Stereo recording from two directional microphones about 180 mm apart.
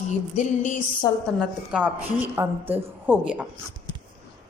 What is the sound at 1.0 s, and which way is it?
Speech, 20° left (ahead or behind).